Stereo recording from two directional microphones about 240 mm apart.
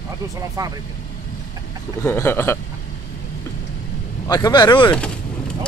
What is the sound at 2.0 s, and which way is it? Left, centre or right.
Speech, centre.